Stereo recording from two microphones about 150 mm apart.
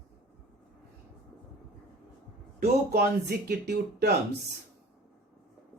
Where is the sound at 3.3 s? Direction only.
90° right.